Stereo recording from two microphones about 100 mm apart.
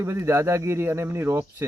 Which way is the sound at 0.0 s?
25° right (ahead or behind).